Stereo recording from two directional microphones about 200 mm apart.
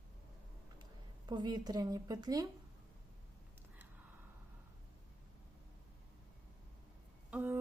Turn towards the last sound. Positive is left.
turn(degrees=-5)  # may be behind; listen again after turning